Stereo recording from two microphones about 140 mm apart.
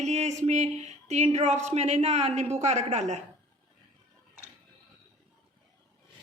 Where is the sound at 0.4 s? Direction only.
50° right (ahead or behind).